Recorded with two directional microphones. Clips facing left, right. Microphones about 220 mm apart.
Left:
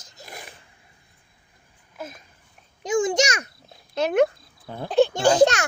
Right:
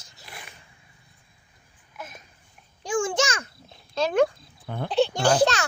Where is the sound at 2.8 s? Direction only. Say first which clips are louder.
Left 3 dB; 20° left (ahead or behind).